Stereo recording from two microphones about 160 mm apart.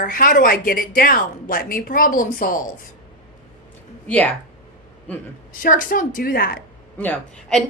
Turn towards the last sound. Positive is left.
turn(degrees=5)  # may be behind; listen again after turning